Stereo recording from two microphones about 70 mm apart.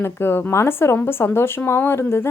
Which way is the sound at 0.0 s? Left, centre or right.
Left.